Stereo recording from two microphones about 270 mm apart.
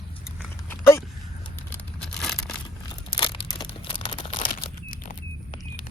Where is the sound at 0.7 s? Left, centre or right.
Centre.